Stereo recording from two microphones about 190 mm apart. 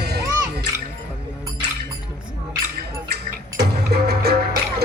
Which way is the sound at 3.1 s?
60° right (ahead or behind).